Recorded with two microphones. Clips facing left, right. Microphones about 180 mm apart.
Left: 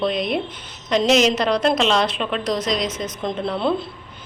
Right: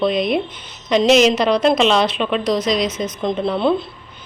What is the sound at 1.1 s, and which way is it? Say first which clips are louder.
Speech: right 4 dB; 5° right (ahead or behind).